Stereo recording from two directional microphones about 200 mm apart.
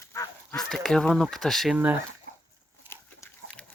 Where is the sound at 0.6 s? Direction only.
5° left (ahead or behind).